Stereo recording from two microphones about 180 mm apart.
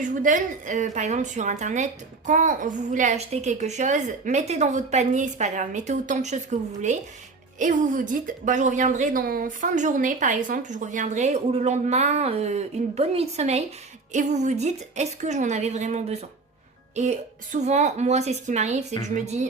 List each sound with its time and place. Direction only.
0.0 s a woman's voice: 45° right (ahead or behind)